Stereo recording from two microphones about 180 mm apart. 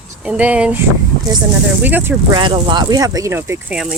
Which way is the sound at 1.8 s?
10° right (ahead or behind).